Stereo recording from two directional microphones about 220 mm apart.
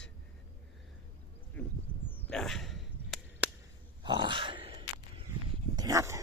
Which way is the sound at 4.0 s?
20° right (ahead or behind).